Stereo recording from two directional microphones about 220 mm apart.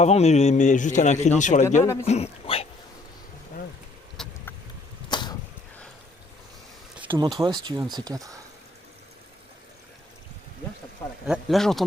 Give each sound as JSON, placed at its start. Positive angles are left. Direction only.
{"t": 0.0, "sound": "a man's voice", "side_deg": 30}
{"t": 1.8, "sound": "speech", "side_deg": 10}
{"t": 2.0, "sound": "speech", "side_deg": 30}
{"t": 4.2, "sound": "vehicle", "side_deg": 0}
{"t": 5.0, "sound": "arrow", "side_deg": 20}
{"t": 6.9, "sound": "a sound", "side_deg": -5}
{"t": 7.3, "sound": "speech", "side_deg": -20}
{"t": 11.3, "sound": "speech", "side_deg": 0}